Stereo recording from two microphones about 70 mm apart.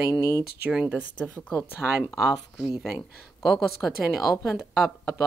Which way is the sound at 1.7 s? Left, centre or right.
Right.